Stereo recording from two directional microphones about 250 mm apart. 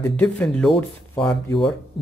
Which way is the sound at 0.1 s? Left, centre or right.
Centre.